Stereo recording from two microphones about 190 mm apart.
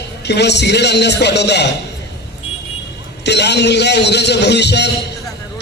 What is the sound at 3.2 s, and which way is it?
A man's voice, 65° left (ahead or behind).